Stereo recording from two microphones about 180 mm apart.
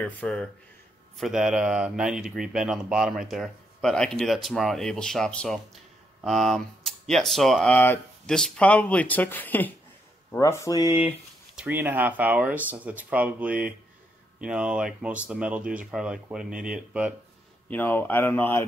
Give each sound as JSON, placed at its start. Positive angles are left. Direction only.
{"t": 0.0, "sound": "speech", "side_deg": 5}
{"t": 11.5, "sound": "speech", "side_deg": -10}
{"t": 17.6, "sound": "speech", "side_deg": 10}